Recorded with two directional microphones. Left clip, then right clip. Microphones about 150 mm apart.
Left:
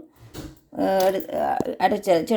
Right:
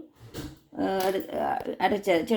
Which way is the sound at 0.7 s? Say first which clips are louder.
Left 7 dB; 40° left (ahead or behind).